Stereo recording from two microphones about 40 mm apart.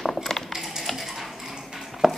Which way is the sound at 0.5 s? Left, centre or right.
Centre.